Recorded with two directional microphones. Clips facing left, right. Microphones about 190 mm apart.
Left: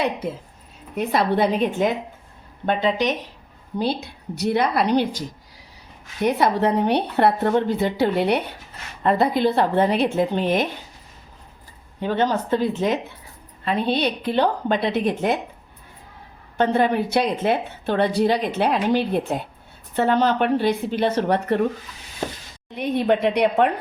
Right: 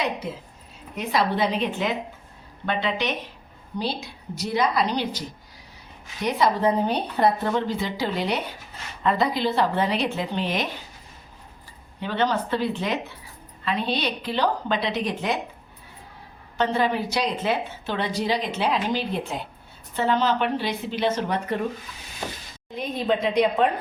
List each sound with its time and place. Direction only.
0.9 s a woman's voice: 55° left (ahead or behind)
3.8 s a woman's voice: 55° left (ahead or behind)
6.2 s a woman's voice: 60° left (ahead or behind)
11.9 s a woman's voice: 45° left (ahead or behind)
16.6 s a woman's voice: 55° left (ahead or behind)
21.2 s a woman's voice: 65° left (ahead or behind)
22.7 s a woman's voice: 65° left (ahead or behind)